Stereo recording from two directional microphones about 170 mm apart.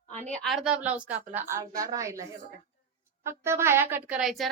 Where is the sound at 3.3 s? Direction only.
15° right (ahead or behind).